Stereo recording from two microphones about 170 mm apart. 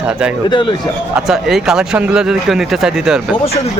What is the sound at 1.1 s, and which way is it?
Speech, centre (ahead or behind).